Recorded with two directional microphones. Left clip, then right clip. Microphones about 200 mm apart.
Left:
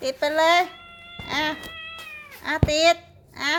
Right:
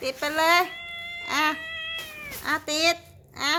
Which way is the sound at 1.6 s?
20° right (ahead or behind).